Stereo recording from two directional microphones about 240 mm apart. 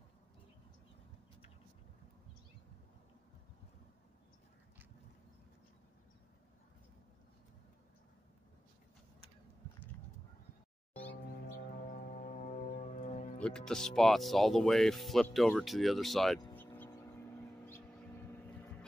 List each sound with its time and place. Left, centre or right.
10.9 s music: centre
11.1 s music: left
13.4 s speech: centre
16.3 s a sound: centre